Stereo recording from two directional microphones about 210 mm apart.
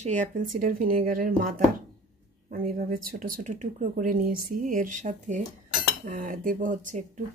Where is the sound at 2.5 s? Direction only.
40° right (ahead or behind).